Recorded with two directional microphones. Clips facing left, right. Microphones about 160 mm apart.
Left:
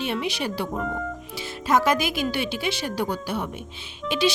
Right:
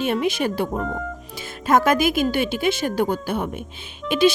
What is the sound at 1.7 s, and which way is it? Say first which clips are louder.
Speech: right 4 dB; 50° right (ahead or behind).